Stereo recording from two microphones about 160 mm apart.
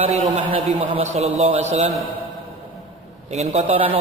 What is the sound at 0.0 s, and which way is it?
A man's voice, 35° right (ahead or behind).